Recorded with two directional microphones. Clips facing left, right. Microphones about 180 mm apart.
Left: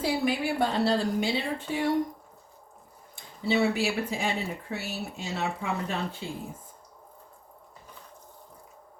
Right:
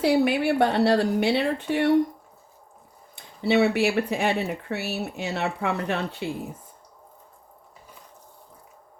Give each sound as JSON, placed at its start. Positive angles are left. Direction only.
{"t": 0.0, "sound": "speech", "side_deg": -65}
{"t": 3.4, "sound": "speech", "side_deg": -65}